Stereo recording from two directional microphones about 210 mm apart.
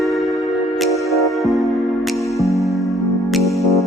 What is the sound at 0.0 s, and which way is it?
Music, centre (ahead or behind).